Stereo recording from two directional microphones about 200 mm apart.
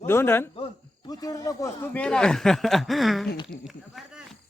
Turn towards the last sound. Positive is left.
turn(degrees=0)  # may be behind; listen again after turning